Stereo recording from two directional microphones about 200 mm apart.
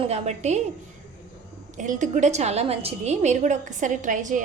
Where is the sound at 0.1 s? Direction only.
35° right (ahead or behind).